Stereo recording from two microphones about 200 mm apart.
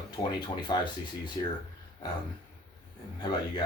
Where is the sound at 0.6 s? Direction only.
20° left (ahead or behind).